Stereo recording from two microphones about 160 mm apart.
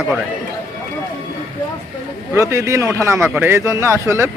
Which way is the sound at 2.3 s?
20° right (ahead or behind).